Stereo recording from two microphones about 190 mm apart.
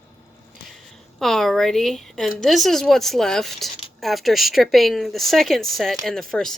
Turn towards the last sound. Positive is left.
turn(degrees=0)  # may be behind; listen again after turning